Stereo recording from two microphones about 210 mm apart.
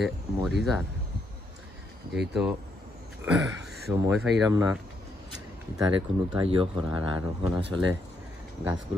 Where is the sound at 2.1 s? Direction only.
Centre (ahead or behind).